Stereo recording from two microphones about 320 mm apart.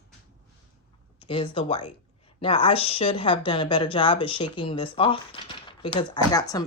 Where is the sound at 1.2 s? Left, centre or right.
Centre.